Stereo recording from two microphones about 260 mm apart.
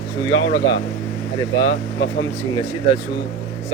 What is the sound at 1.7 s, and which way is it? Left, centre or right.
Speech, left.